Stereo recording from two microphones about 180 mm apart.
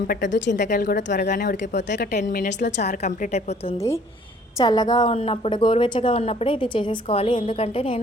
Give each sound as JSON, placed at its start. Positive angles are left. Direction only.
{"t": 0.3, "sound": "speech", "side_deg": 80}
{"t": 0.7, "sound": "speech", "side_deg": 50}
{"t": 1.7, "sound": "speech", "side_deg": 70}
{"t": 2.3, "sound": "a woman's voice", "side_deg": 50}
{"t": 4.5, "sound": "a woman's voice", "side_deg": 20}